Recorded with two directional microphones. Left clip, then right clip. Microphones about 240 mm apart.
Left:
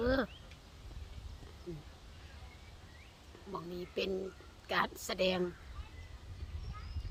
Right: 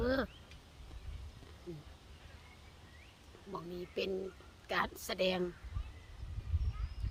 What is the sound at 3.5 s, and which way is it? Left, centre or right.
Speech, centre.